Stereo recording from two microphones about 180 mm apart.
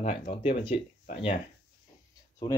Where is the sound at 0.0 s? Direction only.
35° left (ahead or behind).